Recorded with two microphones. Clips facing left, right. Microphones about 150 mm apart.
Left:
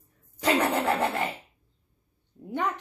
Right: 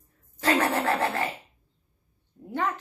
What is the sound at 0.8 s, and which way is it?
Speech, 15° left (ahead or behind).